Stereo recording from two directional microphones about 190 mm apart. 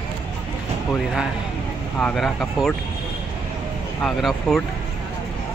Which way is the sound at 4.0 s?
Centre (ahead or behind).